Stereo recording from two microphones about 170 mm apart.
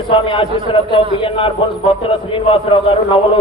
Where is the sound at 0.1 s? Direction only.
30° left (ahead or behind).